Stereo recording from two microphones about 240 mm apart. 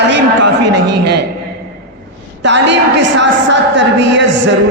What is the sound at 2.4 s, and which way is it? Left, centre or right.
A woman's voice, right.